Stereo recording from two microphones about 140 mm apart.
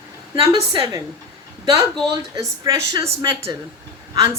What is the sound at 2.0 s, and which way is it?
Speech, 25° right (ahead or behind).